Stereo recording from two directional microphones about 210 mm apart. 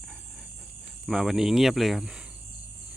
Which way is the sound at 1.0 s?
Centre (ahead or behind).